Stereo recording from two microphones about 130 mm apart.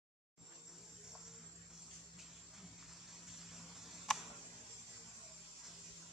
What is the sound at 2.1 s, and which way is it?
Music, centre (ahead or behind).